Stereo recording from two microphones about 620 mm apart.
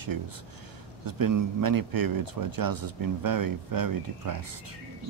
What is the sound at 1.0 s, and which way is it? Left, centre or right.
A man's voice, right.